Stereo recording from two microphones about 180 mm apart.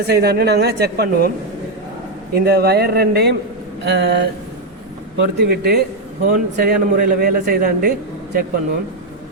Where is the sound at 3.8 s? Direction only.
85° right.